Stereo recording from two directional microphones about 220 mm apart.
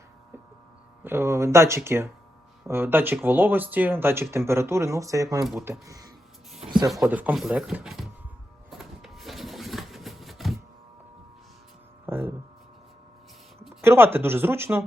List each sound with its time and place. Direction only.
1.0 s speech: 10° right (ahead or behind)
6.7 s rub: 15° right (ahead or behind)
7.0 s speech: 5° right (ahead or behind)
8.7 s a sound: centre (ahead or behind)
12.0 s a sound: 10° right (ahead or behind)
13.8 s speech: 10° right (ahead or behind)